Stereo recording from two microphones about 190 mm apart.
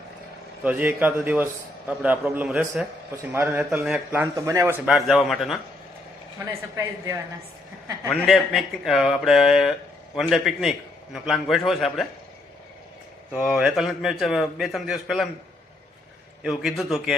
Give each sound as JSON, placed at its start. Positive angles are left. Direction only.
{"t": 0.6, "sound": "a man's voice", "side_deg": -10}
{"t": 4.9, "sound": "a man's voice", "side_deg": 0}
{"t": 6.4, "sound": "a man's voice", "side_deg": -15}
{"t": 8.1, "sound": "a man's voice", "side_deg": 0}
{"t": 13.3, "sound": "a man's voice", "side_deg": -5}
{"t": 16.4, "sound": "a man's voice", "side_deg": 0}